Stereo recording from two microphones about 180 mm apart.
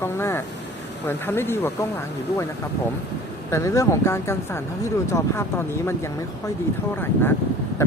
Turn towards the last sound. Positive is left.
turn(degrees=15)  # may be behind; listen again after turning